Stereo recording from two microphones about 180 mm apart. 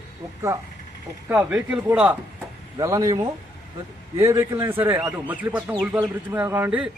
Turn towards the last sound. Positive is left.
turn(degrees=-10)  # may be behind; listen again after turning